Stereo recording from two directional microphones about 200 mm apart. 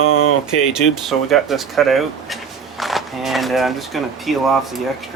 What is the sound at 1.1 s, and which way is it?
Speech, centre (ahead or behind).